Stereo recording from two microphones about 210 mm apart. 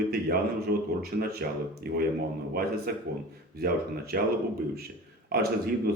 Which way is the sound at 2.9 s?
45° right (ahead or behind).